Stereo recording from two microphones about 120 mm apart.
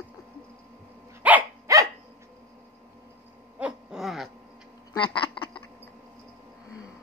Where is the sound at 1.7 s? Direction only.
25° right (ahead or behind).